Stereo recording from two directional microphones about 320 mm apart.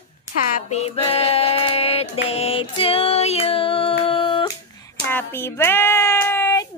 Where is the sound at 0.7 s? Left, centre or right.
Centre.